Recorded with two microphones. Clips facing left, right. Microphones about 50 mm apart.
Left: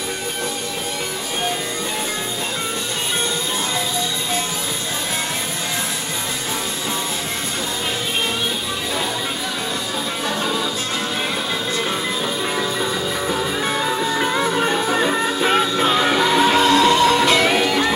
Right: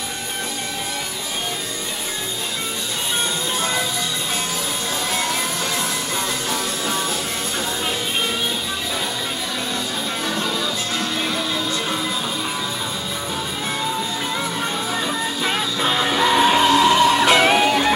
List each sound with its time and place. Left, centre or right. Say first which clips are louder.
13.3 s music: left 5 dB; left
15.4 s music: left 4 dB; centre
16.3 s music: right 2 dB; centre; by 17.7 s right